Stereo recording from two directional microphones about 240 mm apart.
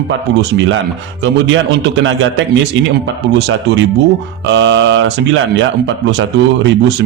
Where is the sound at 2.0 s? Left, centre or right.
Right.